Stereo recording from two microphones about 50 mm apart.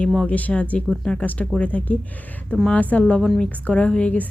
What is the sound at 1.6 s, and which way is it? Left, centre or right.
A woman's voice, left.